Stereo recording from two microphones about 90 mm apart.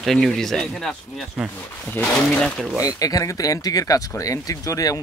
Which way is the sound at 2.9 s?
40° left (ahead or behind).